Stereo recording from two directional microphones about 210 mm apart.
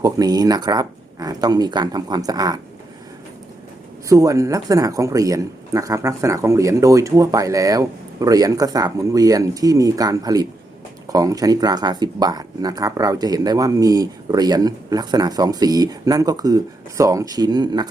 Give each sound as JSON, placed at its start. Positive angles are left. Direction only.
{"t": 0.0, "sound": "speech", "side_deg": -20}
{"t": 4.1, "sound": "speech", "side_deg": -15}